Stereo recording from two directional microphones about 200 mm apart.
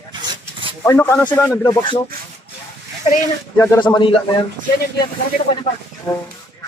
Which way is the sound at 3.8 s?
25° left (ahead or behind).